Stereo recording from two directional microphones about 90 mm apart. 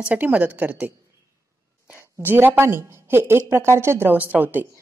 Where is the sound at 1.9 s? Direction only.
20° right (ahead or behind).